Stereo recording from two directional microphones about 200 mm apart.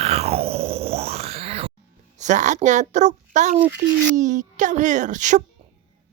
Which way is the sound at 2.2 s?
35° right (ahead or behind).